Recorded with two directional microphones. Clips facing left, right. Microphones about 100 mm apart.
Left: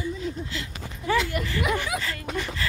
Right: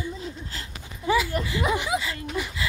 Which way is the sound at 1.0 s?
5° right (ahead or behind).